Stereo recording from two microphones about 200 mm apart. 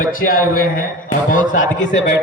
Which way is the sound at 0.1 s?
45° left (ahead or behind).